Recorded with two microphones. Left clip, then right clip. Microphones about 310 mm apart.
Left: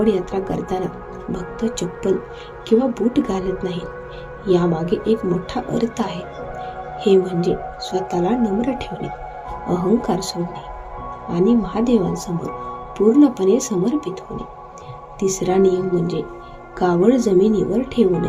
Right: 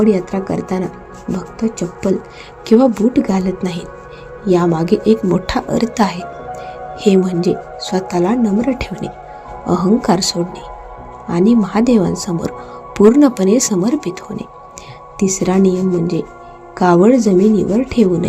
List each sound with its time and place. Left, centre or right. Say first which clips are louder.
0.0 s a woman's voice: right 4 dB; right
2.6 s a woman's voice: right 6 dB; right
15.2 s a woman's voice: right 2 dB; right